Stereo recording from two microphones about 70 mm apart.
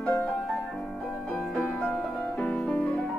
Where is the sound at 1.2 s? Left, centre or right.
Centre.